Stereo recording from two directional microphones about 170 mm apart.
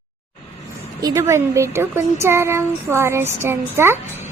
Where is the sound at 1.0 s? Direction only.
20° right (ahead or behind).